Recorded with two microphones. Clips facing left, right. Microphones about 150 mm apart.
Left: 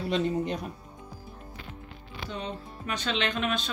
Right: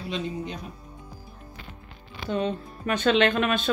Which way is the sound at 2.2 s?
55° right (ahead or behind).